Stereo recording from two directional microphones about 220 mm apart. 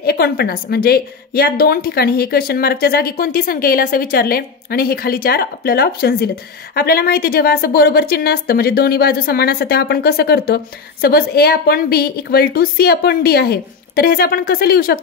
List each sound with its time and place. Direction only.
0.0 s a woman's voice: 45° left (ahead or behind)